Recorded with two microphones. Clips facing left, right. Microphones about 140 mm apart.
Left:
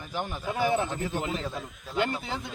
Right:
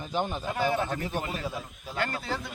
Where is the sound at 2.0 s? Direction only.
20° left (ahead or behind).